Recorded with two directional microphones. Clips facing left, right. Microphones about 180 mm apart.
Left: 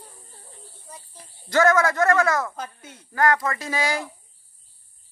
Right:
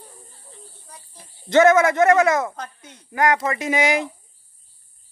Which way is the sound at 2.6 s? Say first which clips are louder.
Even; 5° left (ahead or behind).